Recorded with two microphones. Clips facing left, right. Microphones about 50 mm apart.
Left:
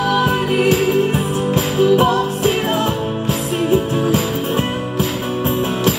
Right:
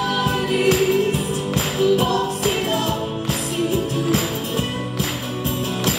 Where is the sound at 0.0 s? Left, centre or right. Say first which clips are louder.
Left 5 dB; left.